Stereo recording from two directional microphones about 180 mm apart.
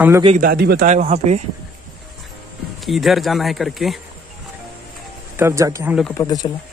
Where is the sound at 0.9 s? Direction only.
40° right (ahead or behind).